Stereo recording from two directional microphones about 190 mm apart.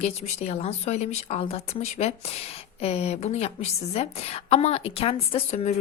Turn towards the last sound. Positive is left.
turn(degrees=35)  # may be behind; listen again after turning